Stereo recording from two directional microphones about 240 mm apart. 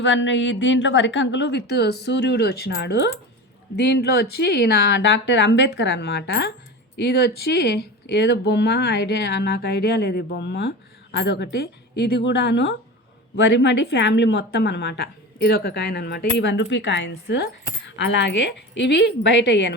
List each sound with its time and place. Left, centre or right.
0.0 s a woman's voice: left